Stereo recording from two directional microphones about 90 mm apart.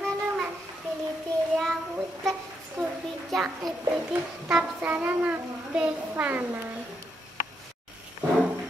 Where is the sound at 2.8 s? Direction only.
Centre (ahead or behind).